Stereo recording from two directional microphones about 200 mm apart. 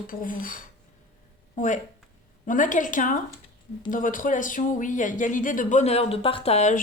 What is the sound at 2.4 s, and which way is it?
Speech, 40° left (ahead or behind).